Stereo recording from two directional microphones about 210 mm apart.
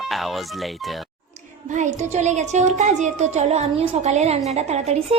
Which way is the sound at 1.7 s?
35° right (ahead or behind).